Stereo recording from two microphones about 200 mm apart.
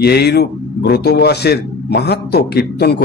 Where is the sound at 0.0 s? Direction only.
55° left (ahead or behind).